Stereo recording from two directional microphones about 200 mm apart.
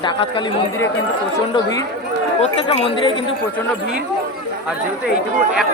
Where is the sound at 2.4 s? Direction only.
30° left (ahead or behind).